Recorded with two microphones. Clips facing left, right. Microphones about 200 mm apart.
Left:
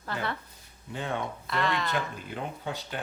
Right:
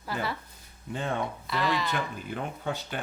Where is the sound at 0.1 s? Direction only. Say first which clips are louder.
Right 1 dB; 5° right (ahead or behind).